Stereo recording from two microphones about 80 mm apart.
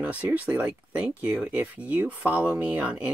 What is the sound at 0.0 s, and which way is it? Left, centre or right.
Speech, centre.